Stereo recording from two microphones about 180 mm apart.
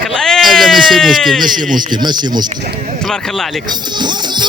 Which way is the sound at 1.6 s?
50° right (ahead or behind).